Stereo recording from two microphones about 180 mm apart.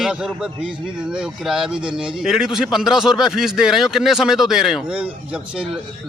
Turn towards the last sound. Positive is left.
turn(degrees=-5)  # may be behind; listen again after turning